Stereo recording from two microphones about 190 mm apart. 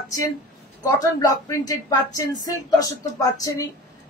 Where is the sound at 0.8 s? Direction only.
20° left (ahead or behind).